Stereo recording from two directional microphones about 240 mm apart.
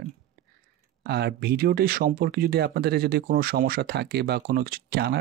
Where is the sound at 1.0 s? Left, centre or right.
Right.